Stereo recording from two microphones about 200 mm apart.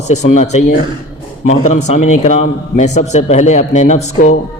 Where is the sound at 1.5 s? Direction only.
35° left (ahead or behind).